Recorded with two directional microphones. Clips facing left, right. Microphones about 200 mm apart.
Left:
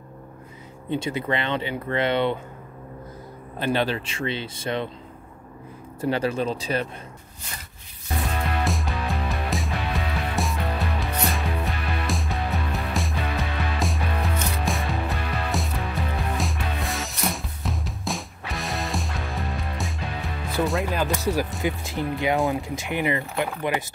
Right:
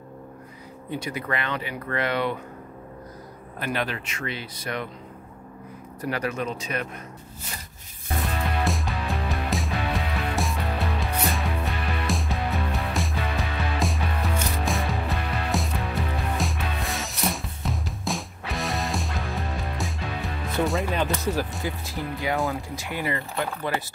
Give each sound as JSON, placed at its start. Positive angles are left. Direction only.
{"t": 0.8, "sound": "speech", "side_deg": 25}
{"t": 3.5, "sound": "speech", "side_deg": 30}
{"t": 5.9, "sound": "speech", "side_deg": 30}
{"t": 8.6, "sound": "music", "side_deg": 0}
{"t": 21.6, "sound": "speech", "side_deg": 20}